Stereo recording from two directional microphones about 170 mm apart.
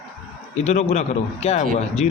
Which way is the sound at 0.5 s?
40° left (ahead or behind).